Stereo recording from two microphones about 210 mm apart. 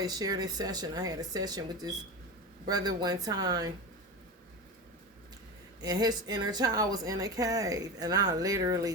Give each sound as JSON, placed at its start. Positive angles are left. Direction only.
{"t": 0.0, "sound": "speech", "side_deg": -20}
{"t": 5.8, "sound": "speech", "side_deg": -20}